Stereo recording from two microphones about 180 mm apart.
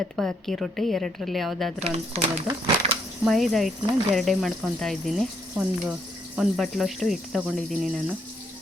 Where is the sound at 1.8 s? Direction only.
35° right (ahead or behind).